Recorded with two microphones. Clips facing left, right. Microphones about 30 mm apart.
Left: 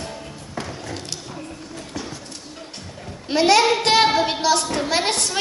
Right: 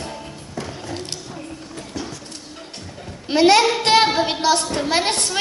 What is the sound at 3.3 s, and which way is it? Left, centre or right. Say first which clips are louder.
A woman's voice: right 2 dB; right.